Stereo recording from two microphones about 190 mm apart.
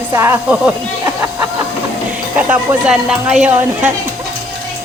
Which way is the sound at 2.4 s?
5° right (ahead or behind).